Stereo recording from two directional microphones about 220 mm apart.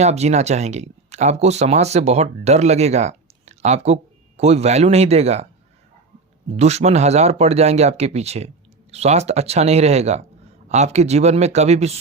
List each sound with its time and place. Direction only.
0.0 s speech: 30° right (ahead or behind)
6.6 s speech: 30° right (ahead or behind)